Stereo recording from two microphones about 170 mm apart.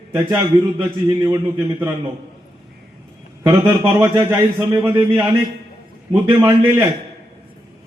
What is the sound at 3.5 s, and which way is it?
Speech, 15° right (ahead or behind).